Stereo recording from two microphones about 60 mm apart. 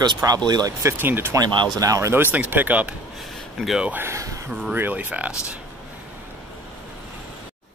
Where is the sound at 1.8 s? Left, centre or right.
Right.